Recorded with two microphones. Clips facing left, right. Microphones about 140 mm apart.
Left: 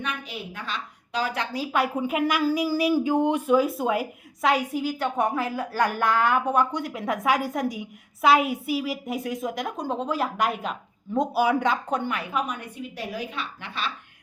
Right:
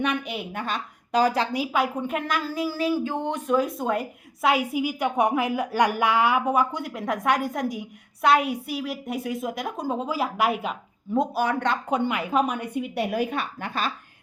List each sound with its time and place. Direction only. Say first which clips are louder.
0.0 s a woman's voice: right 6 dB; 60° right (ahead or behind); by 1.5 s 40° right (ahead or behind)
1.7 s speech: left 4 dB; 5° left (ahead or behind)
11.9 s a woman's voice: right 3 dB; 15° right (ahead or behind)
12.7 s a woman's voice: right 7 dB; 65° right (ahead or behind); by 13.9 s 45° right (ahead or behind)